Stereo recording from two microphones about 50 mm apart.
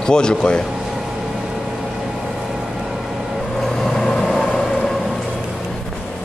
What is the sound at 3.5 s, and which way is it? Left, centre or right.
Vehicle, centre.